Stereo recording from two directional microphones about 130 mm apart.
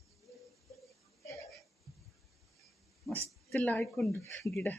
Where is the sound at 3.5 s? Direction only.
10° left (ahead or behind).